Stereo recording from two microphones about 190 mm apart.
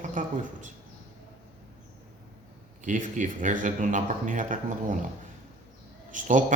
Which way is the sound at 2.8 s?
40° right (ahead or behind).